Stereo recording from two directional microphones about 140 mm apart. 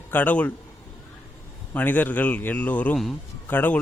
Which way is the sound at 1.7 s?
15° left (ahead or behind).